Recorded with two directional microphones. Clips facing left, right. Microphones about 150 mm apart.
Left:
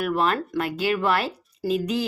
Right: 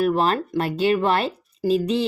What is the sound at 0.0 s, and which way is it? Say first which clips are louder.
A woman's voice: right 3 dB; 30° right (ahead or behind).